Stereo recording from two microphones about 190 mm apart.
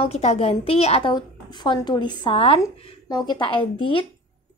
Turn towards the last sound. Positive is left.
turn(degrees=25)  # may be behind; listen again after turning